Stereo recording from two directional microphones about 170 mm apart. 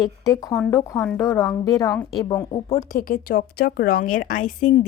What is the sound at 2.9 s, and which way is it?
A woman's voice, 55° left (ahead or behind).